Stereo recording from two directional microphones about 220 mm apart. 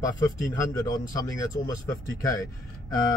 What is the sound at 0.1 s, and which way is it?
Speech, 15° left (ahead or behind).